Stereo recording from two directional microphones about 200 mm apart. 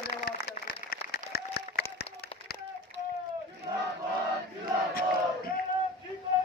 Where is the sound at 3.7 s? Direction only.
25° right (ahead or behind).